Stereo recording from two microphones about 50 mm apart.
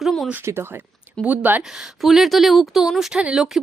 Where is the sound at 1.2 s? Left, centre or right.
Right.